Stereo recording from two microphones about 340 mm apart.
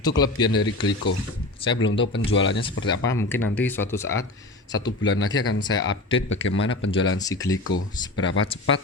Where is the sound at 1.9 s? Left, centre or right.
Left.